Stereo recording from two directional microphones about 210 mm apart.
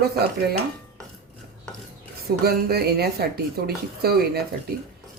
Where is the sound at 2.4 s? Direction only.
45° right (ahead or behind).